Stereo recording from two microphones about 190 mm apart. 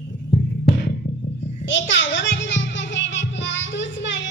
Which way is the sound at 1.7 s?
70° left (ahead or behind).